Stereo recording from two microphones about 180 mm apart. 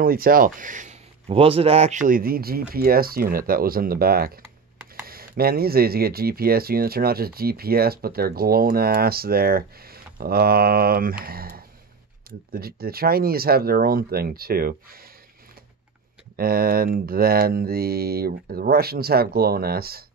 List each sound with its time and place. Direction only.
0.0 s speech: 55° right (ahead or behind)
16.3 s speech: 55° right (ahead or behind)